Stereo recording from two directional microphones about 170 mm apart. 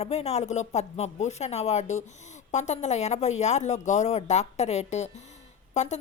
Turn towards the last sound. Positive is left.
turn(degrees=45)  # may be behind; listen again after turning